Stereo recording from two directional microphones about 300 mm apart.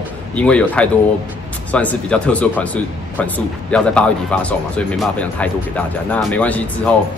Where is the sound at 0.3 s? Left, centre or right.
Centre.